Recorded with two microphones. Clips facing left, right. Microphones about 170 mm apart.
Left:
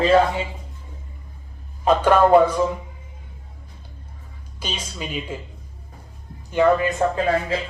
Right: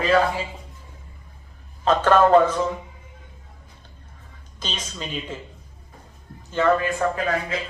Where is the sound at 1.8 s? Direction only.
10° left (ahead or behind).